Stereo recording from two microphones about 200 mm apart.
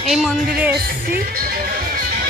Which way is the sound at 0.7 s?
50° right (ahead or behind).